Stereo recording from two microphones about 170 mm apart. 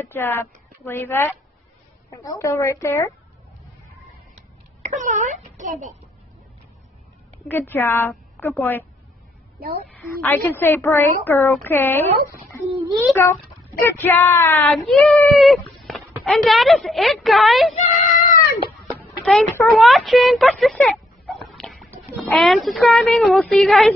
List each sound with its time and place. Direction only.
0.0 s a woman's voice: 15° left (ahead or behind)
4.8 s speech: 45° right (ahead or behind)
7.4 s a woman's voice: 10° left (ahead or behind)
9.9 s a woman's voice: 15° left (ahead or behind)
13.1 s a woman's voice: 15° left (ahead or behind)
14.7 s speech: centre (ahead or behind)
17.7 s a sound: 50° left (ahead or behind)
18.9 s a sound: 15° left (ahead or behind)
19.7 s speech: centre (ahead or behind)